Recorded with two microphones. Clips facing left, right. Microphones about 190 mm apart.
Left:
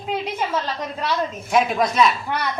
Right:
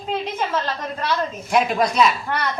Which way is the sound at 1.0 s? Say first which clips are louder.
Even; centre (ahead or behind).